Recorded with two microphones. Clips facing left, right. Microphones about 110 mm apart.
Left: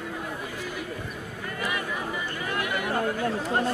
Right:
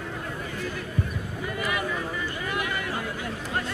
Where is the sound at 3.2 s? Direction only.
35° left (ahead or behind).